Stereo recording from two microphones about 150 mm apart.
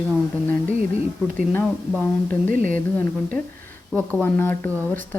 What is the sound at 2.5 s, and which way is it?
Speech, 60° right (ahead or behind).